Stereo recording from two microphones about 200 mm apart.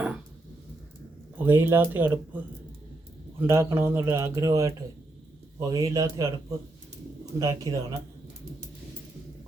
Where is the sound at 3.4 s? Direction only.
10° right (ahead or behind).